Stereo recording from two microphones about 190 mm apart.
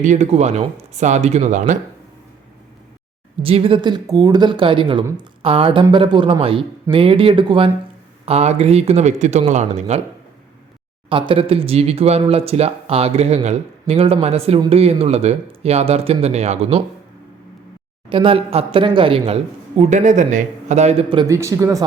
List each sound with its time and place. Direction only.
0.0 s speech: 40° right (ahead or behind)
3.4 s speech: 30° right (ahead or behind)
11.1 s speech: 25° right (ahead or behind)
18.1 s speech: 30° right (ahead or behind)
21.2 s speech: 15° right (ahead or behind)